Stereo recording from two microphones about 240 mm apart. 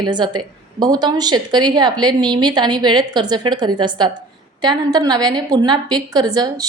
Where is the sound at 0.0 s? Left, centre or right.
Centre.